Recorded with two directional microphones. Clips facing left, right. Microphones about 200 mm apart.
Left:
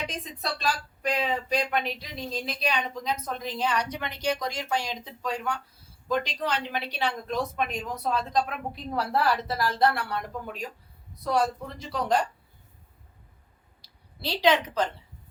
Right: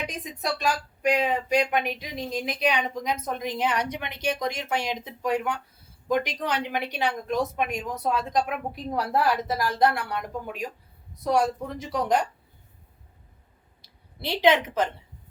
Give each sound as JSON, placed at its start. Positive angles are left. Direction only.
{"t": 0.1, "sound": "speech", "side_deg": -15}
{"t": 14.2, "sound": "speech", "side_deg": -20}